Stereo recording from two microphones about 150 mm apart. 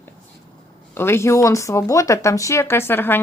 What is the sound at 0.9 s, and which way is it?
Speech, 15° left (ahead or behind).